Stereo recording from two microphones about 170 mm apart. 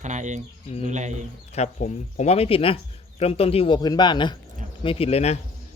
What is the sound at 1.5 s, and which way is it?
Speech, 40° left (ahead or behind).